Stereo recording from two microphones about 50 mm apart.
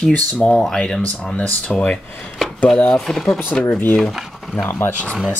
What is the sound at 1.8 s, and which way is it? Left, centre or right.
Speech, left.